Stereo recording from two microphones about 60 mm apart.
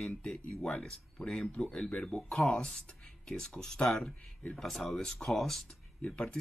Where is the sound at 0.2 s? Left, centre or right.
Centre.